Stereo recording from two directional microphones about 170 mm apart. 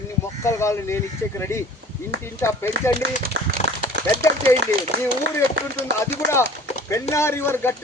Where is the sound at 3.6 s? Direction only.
40° left (ahead or behind).